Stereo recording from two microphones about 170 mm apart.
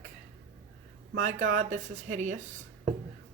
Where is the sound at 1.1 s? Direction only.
50° right (ahead or behind).